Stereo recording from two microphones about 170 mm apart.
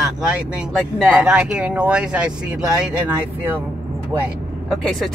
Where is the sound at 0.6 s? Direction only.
5° right (ahead or behind).